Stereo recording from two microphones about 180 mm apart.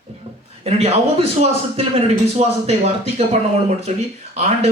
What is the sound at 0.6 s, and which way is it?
Speech, 35° right (ahead or behind).